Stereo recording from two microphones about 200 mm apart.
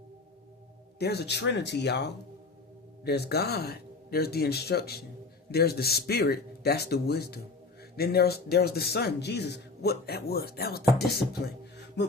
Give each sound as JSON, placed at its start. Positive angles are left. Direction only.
{"t": 0.9, "sound": "speech", "side_deg": 55}